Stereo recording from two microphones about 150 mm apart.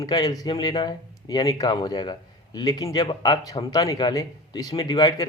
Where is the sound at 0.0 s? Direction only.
25° left (ahead or behind).